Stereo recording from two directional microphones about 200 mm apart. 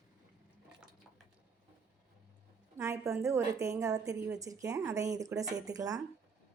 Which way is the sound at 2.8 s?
15° right (ahead or behind).